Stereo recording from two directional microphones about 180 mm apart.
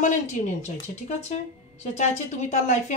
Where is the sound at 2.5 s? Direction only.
40° left (ahead or behind).